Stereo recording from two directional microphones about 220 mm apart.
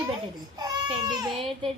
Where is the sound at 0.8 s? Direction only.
20° right (ahead or behind).